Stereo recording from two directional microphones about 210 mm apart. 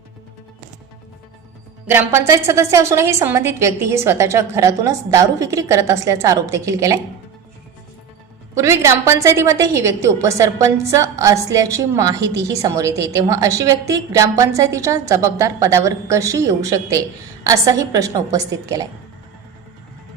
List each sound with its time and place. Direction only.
1.9 s a woman's voice: 15° right (ahead or behind)
8.5 s a woman's voice: 15° right (ahead or behind)